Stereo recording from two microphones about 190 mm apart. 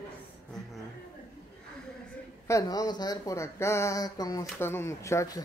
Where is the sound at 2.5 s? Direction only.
20° left (ahead or behind).